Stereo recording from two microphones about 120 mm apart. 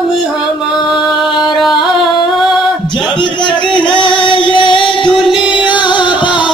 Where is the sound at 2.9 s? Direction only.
40° left (ahead or behind).